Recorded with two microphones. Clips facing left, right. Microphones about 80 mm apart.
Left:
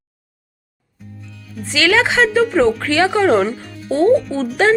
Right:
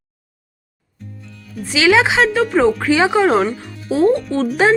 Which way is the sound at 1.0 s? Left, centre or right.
Centre.